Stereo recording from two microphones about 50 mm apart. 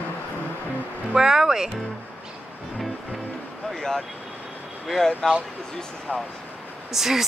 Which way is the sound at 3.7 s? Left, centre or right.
Centre.